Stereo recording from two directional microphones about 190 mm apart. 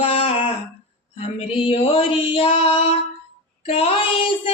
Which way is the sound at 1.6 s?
30° left (ahead or behind).